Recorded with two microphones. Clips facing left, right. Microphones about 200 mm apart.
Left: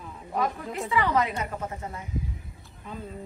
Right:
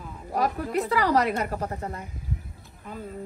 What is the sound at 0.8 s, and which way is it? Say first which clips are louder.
A woman's voice: right 1 dB; 40° right (ahead or behind).